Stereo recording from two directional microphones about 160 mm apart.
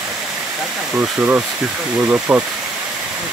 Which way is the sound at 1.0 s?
10° right (ahead or behind).